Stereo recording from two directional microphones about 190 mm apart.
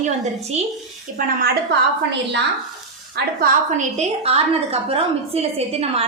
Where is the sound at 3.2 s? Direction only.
60° right (ahead or behind).